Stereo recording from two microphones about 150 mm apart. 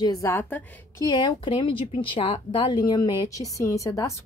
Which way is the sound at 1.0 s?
30° left (ahead or behind).